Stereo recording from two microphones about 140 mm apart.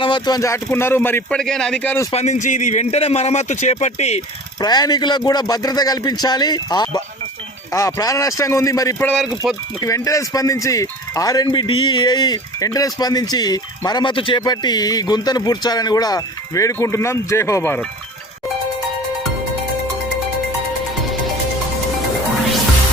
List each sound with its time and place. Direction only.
0.0 s speech: 30° left (ahead or behind); by 1.4 s 15° left (ahead or behind)
1.4 s speech: 5° left (ahead or behind)
2.1 s speech: 55° left (ahead or behind)
4.6 s speech: 30° left (ahead or behind)
9.2 s speech: 5° right (ahead or behind)
9.8 s speech: 25° left (ahead or behind)